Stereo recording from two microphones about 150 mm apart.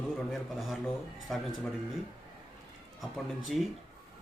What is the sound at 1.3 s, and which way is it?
Speech, 5° left (ahead or behind).